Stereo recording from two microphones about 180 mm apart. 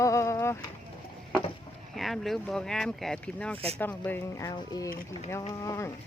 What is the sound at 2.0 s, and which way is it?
Speech, centre (ahead or behind).